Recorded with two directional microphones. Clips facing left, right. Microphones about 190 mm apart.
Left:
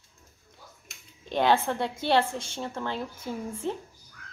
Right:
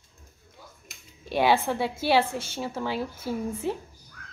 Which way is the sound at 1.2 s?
10° right (ahead or behind).